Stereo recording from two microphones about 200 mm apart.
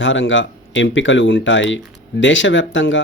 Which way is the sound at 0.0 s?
70° left (ahead or behind).